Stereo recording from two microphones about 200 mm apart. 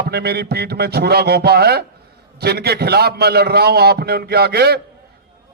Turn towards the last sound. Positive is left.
turn(degrees=-55)  # may be behind; listen again after turning